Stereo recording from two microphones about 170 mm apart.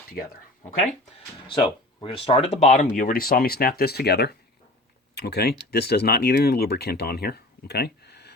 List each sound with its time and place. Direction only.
1.5 s speech: 30° left (ahead or behind); by 8.3 s 75° left (ahead or behind)